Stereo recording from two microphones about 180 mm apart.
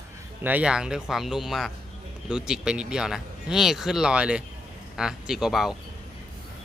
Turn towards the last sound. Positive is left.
turn(degrees=0)  # may be behind; listen again after turning